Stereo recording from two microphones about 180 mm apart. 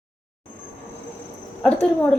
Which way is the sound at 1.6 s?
5° left (ahead or behind).